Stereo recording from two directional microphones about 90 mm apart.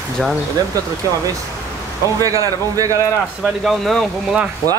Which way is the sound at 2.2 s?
40° right (ahead or behind).